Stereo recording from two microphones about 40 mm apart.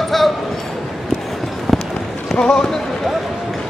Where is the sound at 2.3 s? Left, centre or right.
Left.